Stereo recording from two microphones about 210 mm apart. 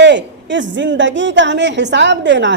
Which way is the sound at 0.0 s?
60° right (ahead or behind).